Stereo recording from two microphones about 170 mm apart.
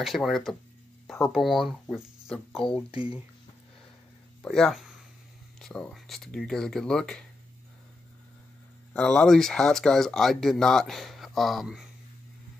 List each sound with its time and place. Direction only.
0.0 s speech: centre (ahead or behind)
2.7 s speech: 30° left (ahead or behind)
4.4 s speech: centre (ahead or behind)
8.9 s speech: 5° left (ahead or behind)